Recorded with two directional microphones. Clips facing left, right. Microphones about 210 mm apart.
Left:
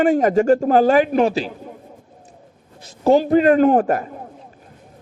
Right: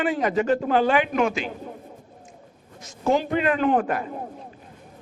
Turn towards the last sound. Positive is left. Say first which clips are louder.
# left 7 dB
turn(degrees=40)  # may be behind; listen again after turning